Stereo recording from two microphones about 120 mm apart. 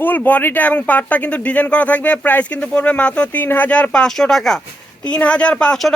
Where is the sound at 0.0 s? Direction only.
15° left (ahead or behind).